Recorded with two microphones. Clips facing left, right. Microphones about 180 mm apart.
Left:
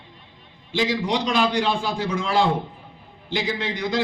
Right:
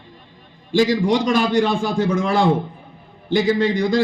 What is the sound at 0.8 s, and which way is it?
A man's voice, 45° right (ahead or behind).